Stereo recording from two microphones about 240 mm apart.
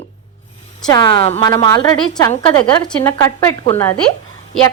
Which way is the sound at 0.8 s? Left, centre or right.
Centre.